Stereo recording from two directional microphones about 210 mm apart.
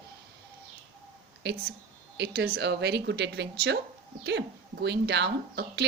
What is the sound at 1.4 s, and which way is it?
A woman's voice, 55° right (ahead or behind).